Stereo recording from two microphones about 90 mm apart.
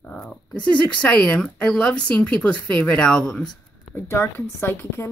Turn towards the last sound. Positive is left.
turn(degrees=25)  # may be behind; listen again after turning